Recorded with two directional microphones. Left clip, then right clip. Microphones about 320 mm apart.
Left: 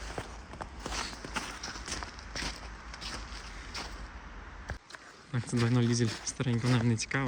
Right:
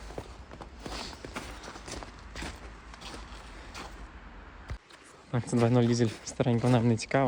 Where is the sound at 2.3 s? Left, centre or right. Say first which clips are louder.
Left 3 dB; right.